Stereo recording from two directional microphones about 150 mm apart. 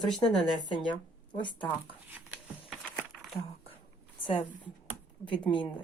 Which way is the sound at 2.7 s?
Centre (ahead or behind).